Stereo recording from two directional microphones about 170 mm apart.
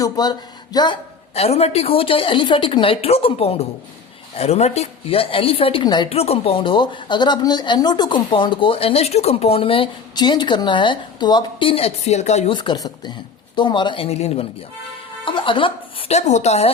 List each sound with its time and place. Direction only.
0.0 s speech: 25° left (ahead or behind)
1.3 s a woman's voice: 40° left (ahead or behind)
12.5 s a woman's voice: 25° left (ahead or behind)